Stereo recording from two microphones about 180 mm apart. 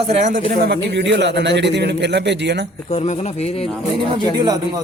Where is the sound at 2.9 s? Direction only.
35° left (ahead or behind).